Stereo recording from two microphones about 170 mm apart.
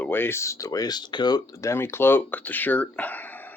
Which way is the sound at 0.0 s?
10° left (ahead or behind).